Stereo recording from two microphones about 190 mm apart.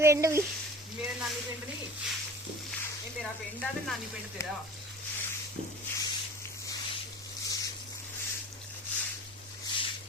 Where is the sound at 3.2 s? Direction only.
Centre (ahead or behind).